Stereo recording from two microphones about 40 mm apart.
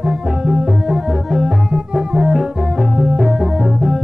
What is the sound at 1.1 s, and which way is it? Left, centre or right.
Music, centre.